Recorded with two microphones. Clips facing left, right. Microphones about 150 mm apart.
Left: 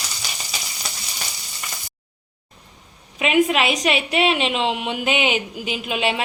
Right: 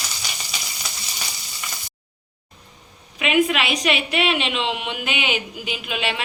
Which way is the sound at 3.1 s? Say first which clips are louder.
Left 2 dB; 35° left (ahead or behind).